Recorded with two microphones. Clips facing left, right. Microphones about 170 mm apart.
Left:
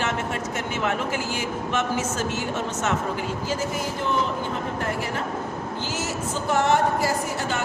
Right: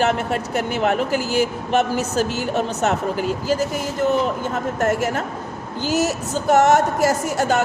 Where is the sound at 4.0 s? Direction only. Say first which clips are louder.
Right 8 dB; 45° right (ahead or behind).